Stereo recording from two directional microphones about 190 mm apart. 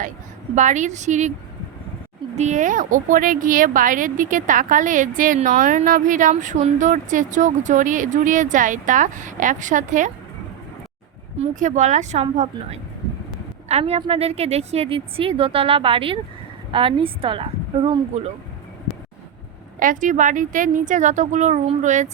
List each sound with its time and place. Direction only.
0.5 s speech: 40° right (ahead or behind)
2.3 s speech: 40° right (ahead or behind)
11.3 s a woman's voice: 40° right (ahead or behind)
19.8 s speech: 45° right (ahead or behind)